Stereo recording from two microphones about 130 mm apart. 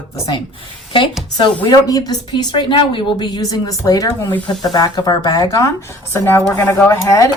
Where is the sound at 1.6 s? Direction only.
30° left (ahead or behind).